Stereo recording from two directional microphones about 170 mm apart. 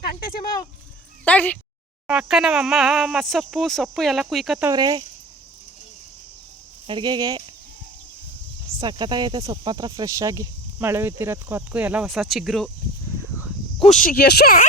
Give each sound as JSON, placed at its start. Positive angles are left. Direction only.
{"t": 1.2, "sound": "speech", "side_deg": 10}
{"t": 2.0, "sound": "speech", "side_deg": -5}
{"t": 4.7, "sound": "speech", "side_deg": -25}
{"t": 6.8, "sound": "speech", "side_deg": -25}
{"t": 8.8, "sound": "speech", "side_deg": -25}
{"t": 13.7, "sound": "speech", "side_deg": 45}